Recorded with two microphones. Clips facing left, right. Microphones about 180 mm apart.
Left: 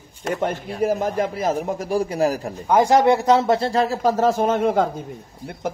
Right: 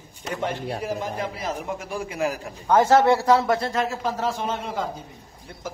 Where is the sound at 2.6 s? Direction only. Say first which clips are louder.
Left 1 dB; 15° left (ahead or behind).